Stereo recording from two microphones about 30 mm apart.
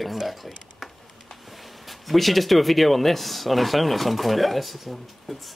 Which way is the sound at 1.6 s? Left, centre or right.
Centre.